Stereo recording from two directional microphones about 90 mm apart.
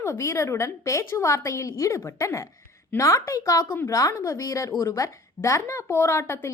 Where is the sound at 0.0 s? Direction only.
30° left (ahead or behind).